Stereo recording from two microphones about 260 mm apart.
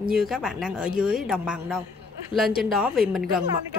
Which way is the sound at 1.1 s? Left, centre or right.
Centre.